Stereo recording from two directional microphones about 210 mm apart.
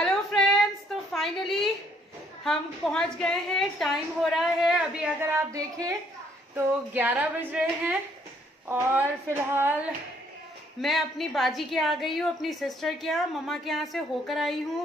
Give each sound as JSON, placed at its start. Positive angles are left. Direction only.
{"t": 0.0, "sound": "a sound", "side_deg": 5}
{"t": 2.4, "sound": "a woman's voice", "side_deg": 5}
{"t": 5.5, "sound": "a woman's voice", "side_deg": -15}